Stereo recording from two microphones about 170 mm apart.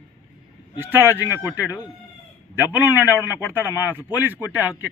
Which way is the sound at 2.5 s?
10° right (ahead or behind).